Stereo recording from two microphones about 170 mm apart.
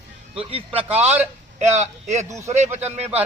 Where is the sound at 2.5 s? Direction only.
40° right (ahead or behind).